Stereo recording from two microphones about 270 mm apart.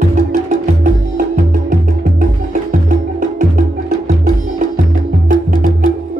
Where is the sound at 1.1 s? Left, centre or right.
Right.